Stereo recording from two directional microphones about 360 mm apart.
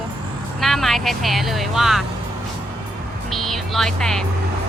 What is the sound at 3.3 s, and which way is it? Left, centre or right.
Vehicle, centre.